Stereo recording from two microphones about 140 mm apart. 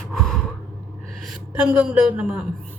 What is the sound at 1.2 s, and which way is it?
A woman's voice, 5° right (ahead or behind).